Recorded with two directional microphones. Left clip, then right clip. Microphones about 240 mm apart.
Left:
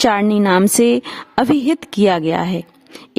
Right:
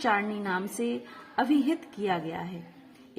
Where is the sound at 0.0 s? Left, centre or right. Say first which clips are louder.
Left 13 dB; left.